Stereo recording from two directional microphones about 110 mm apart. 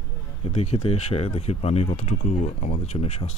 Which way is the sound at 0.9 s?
70° left (ahead or behind).